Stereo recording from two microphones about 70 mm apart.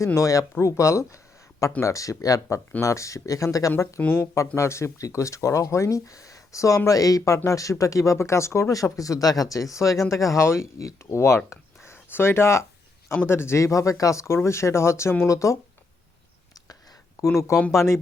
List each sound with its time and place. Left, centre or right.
0.2 s speech: left
4.0 s speech: left
4.4 s speech: left
13.7 s speech: left
17.2 s speech: left